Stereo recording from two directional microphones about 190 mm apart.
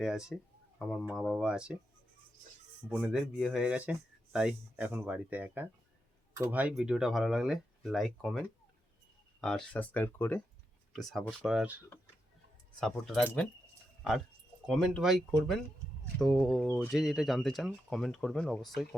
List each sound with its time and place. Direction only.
0.0 s speech: 5° right (ahead or behind)
2.9 s speech: centre (ahead or behind)
10.9 s speech: centre (ahead or behind)
12.8 s speech: 5° left (ahead or behind)
14.7 s speech: centre (ahead or behind)